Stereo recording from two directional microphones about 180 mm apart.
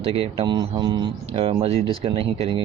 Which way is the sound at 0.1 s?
30° right (ahead or behind).